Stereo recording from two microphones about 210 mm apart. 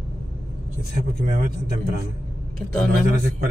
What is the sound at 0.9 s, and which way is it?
Speech, 40° right (ahead or behind).